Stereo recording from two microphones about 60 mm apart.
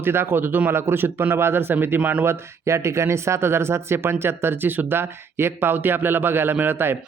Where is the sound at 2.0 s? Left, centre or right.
Right.